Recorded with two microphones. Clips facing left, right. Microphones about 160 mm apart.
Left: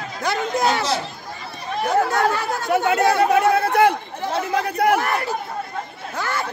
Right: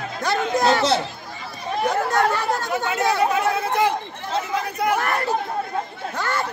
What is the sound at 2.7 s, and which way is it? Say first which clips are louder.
Chatter: left 8 dB; 60° left (ahead or behind).